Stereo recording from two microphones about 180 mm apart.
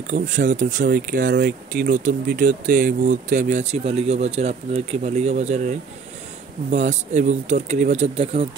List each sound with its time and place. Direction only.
0.1 s speech: 45° right (ahead or behind)